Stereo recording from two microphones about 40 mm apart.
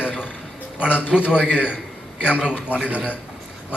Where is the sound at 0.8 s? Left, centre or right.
Right.